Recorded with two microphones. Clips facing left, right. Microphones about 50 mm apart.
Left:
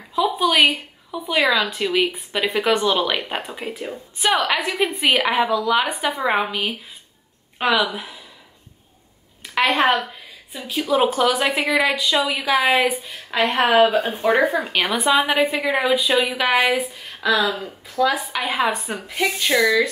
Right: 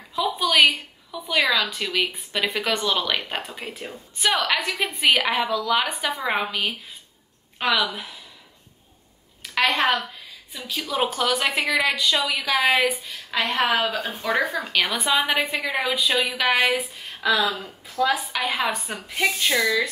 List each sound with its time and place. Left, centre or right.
0.1 s a woman's voice: centre
7.8 s a woman's voice: centre
9.8 s a woman's voice: left
10.9 s a woman's voice: centre
15.4 s a woman's voice: left
15.7 s a woman's voice: centre
19.5 s a woman's voice: centre